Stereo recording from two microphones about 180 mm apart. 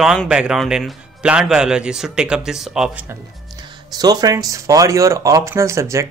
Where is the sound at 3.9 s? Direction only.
20° right (ahead or behind).